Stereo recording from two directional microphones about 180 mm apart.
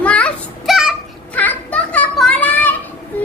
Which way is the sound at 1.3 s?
10° left (ahead or behind).